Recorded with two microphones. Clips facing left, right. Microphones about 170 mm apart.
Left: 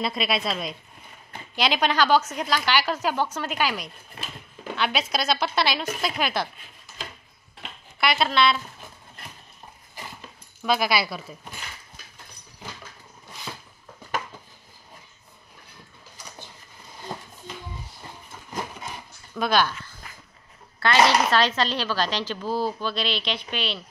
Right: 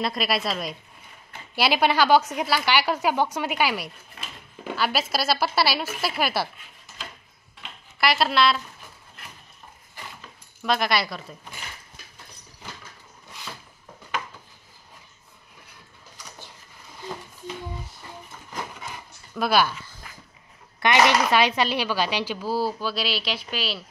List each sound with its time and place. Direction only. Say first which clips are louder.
0.0 s a woman's voice: even; centre (ahead or behind)
8.0 s a woman's voice: right 1 dB; centre (ahead or behind)
10.6 s a woman's voice: even; 5° left (ahead or behind)
19.3 s speech: right 1 dB; 5° right (ahead or behind)
20.8 s a woman's voice: even; 20° right (ahead or behind)